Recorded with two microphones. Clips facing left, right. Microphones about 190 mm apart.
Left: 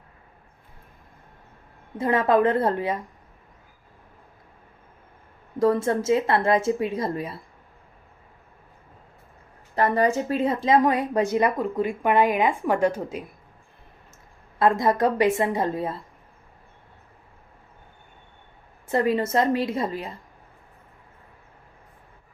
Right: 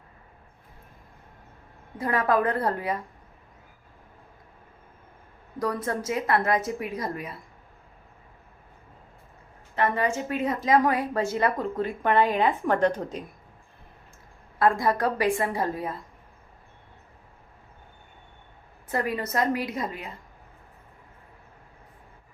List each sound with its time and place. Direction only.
2.0 s speech: 25° left (ahead or behind)
5.5 s speech: 25° left (ahead or behind)
9.7 s speech: 35° left (ahead or behind); by 13.2 s 10° left (ahead or behind)
14.6 s speech: 20° left (ahead or behind)
18.9 s speech: 25° left (ahead or behind)